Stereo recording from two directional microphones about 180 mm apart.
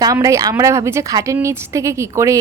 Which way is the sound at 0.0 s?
20° right (ahead or behind).